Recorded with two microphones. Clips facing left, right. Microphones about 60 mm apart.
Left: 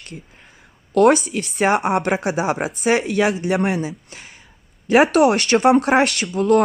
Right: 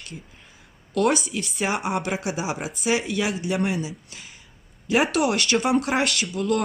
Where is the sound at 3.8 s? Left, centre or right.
Left.